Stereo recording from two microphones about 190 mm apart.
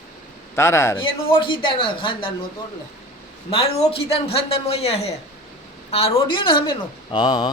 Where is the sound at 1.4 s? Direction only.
25° left (ahead or behind).